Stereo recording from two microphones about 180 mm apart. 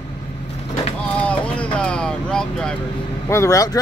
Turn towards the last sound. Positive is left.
turn(degrees=20)  # may be behind; listen again after turning